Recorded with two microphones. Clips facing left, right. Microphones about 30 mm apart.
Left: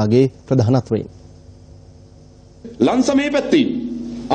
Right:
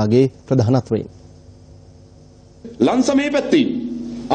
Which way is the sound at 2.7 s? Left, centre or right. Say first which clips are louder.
Even; centre.